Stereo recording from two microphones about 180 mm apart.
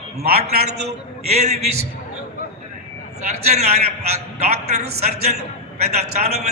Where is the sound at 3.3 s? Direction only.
35° right (ahead or behind).